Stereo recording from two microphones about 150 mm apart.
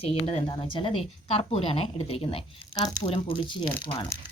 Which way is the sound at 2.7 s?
25° left (ahead or behind).